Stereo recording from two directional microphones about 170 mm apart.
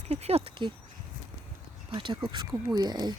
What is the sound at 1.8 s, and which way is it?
Speech, 30° right (ahead or behind).